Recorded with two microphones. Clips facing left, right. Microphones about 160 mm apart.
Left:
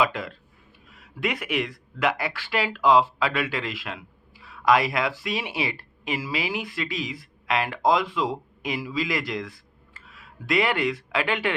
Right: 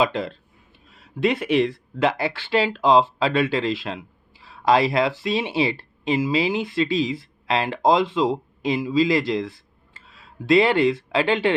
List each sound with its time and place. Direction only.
0.0 s speech: 25° right (ahead or behind)